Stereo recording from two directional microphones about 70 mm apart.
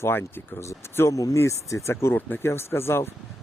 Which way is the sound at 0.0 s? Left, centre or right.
Left.